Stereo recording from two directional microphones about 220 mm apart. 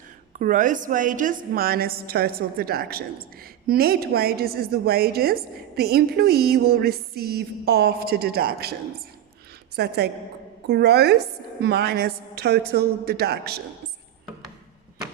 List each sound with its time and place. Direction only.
0.3 s a woman's voice: 35° right (ahead or behind)